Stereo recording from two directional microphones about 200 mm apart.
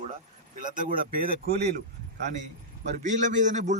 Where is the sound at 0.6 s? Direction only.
40° right (ahead or behind).